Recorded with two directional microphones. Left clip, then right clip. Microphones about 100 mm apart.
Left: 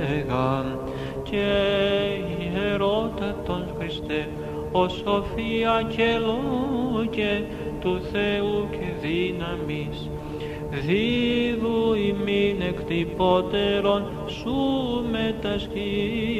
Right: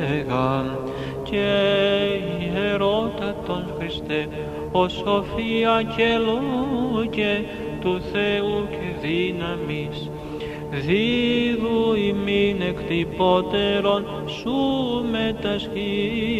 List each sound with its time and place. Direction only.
0.0 s mantra: 35° right (ahead or behind)
1.3 s music: 40° right (ahead or behind)
4.7 s music: 35° right (ahead or behind)
10.9 s music: 40° right (ahead or behind)